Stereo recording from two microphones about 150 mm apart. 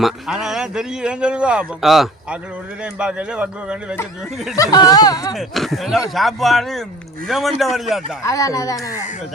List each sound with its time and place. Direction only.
0.0 s a man's voice: 5° right (ahead or behind)
4.5 s speech: 25° left (ahead or behind)
5.3 s a man's voice: centre (ahead or behind)
8.2 s speech: 20° left (ahead or behind)